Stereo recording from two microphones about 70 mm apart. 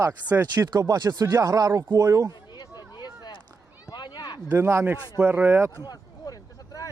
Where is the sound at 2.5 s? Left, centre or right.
Left.